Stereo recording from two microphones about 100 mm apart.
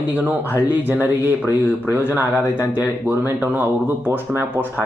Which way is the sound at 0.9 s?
20° right (ahead or behind).